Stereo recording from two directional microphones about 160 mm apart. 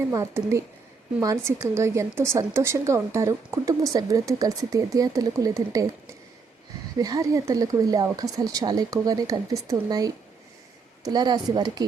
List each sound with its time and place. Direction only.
0.1 s a woman's voice: 20° right (ahead or behind)
7.0 s a woman's voice: 20° right (ahead or behind)